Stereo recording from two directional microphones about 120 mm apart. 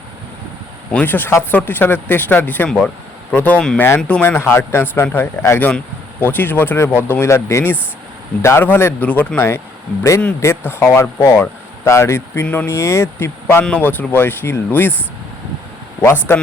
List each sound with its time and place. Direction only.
0.9 s speech: 15° left (ahead or behind)
16.0 s speech: 20° left (ahead or behind)